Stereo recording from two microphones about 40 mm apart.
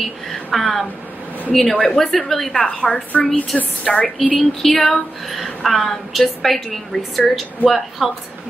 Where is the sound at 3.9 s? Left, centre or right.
Centre.